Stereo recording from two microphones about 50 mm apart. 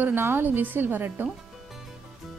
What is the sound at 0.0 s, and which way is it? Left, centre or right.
A woman's voice, right.